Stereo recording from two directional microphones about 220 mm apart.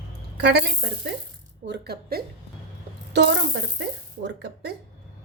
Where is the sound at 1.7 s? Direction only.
45° right (ahead or behind).